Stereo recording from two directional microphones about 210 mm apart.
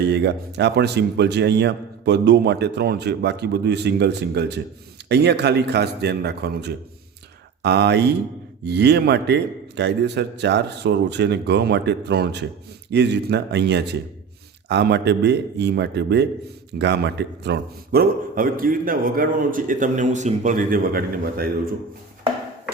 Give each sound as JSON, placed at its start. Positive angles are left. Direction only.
{"t": 0.0, "sound": "a man's voice", "side_deg": -55}